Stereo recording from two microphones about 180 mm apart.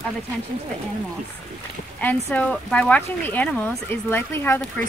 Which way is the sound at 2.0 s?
10° left (ahead or behind).